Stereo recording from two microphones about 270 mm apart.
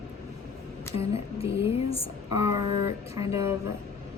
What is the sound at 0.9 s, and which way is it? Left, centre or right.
Speech, left.